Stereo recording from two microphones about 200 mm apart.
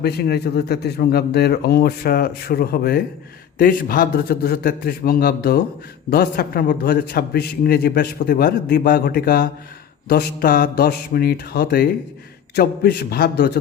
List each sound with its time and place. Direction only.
0.0 s a man's voice: 55° left (ahead or behind)